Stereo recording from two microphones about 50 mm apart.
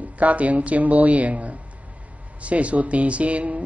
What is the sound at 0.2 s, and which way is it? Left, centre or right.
Speech, right.